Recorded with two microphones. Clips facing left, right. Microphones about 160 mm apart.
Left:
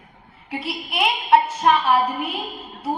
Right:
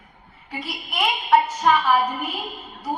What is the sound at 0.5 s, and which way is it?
A woman's voice, 25° left (ahead or behind).